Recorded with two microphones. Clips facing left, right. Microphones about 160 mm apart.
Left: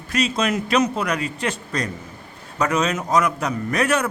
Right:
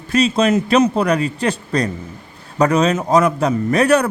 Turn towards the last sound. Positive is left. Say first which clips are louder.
# right 7 dB
turn(degrees=-35)  # may be behind; listen again after turning